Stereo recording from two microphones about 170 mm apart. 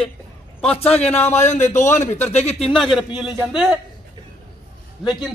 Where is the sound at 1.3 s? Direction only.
45° left (ahead or behind).